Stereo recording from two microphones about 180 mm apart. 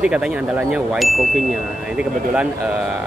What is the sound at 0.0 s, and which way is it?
Speech, 5° right (ahead or behind).